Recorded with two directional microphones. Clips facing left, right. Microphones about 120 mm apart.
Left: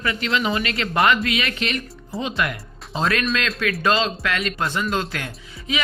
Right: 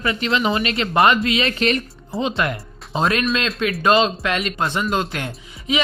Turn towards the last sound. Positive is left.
turn(degrees=-25)  # may be behind; listen again after turning